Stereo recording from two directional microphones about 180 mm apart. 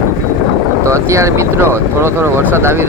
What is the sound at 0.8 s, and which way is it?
Speech, 15° right (ahead or behind).